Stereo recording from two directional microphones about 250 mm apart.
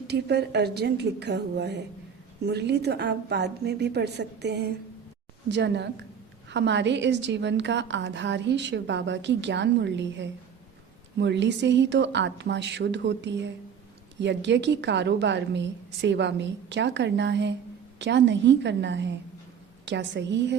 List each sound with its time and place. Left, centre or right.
0.1 s a woman's voice: right